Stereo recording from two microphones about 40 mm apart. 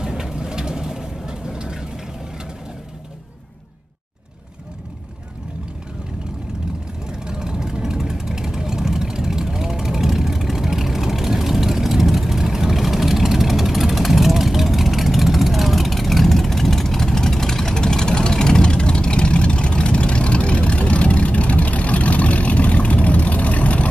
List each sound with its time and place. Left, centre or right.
0.0 s vehicle: centre
7.1 s vehicle: centre; by 23.9 s left